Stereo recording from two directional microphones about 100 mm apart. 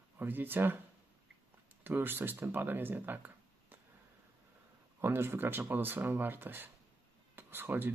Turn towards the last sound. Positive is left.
turn(degrees=-20)  # may be behind; listen again after turning